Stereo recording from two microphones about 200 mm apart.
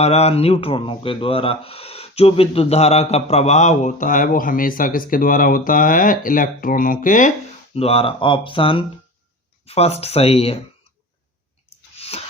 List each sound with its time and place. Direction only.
0.0 s speech: 30° left (ahead or behind)
7.8 s speech: 30° left (ahead or behind)
12.1 s rub: 30° left (ahead or behind)